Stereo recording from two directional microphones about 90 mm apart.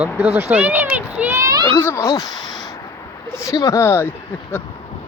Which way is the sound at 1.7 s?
20° left (ahead or behind).